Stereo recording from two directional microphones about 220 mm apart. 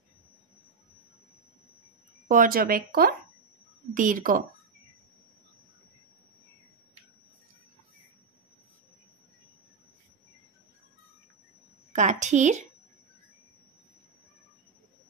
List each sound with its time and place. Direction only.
2.2 s speech: 40° right (ahead or behind)
11.9 s speech: 35° right (ahead or behind)